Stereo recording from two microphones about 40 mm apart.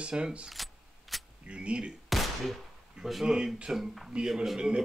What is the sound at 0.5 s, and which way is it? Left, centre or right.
Keys jangling, centre.